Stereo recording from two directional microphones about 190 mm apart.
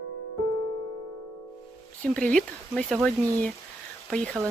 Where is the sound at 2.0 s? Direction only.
5° left (ahead or behind).